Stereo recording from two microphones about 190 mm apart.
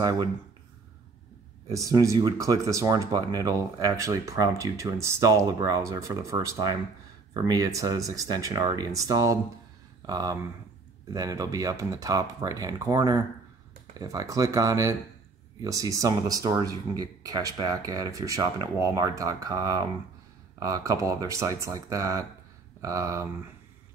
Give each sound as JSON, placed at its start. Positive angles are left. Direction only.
{"t": 0.0, "sound": "speech", "side_deg": -20}
{"t": 1.7, "sound": "speech", "side_deg": -15}